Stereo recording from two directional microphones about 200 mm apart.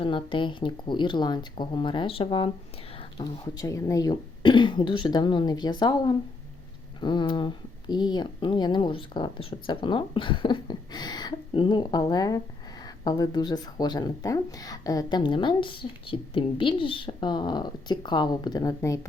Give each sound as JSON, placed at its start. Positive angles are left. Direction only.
{"t": 0.0, "sound": "speech", "side_deg": 25}